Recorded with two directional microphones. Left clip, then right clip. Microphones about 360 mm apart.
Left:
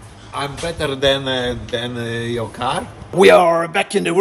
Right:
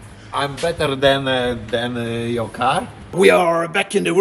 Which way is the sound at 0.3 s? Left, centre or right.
Centre.